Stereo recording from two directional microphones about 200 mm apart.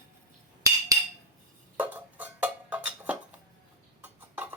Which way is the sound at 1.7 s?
10° right (ahead or behind).